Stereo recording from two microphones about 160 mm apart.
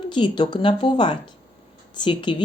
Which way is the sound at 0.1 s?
30° left (ahead or behind).